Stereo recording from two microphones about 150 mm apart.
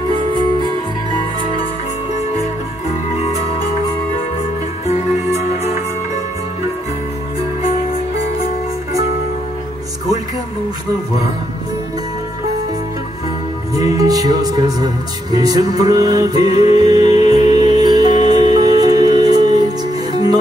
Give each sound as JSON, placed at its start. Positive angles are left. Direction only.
{"t": 4.8, "sound": "music", "side_deg": 45}
{"t": 13.7, "sound": "music", "side_deg": -25}
{"t": 17.2, "sound": "music", "side_deg": 45}
{"t": 17.7, "sound": "music", "side_deg": -25}
{"t": 18.1, "sound": "music", "side_deg": 40}
{"t": 18.7, "sound": "music", "side_deg": -25}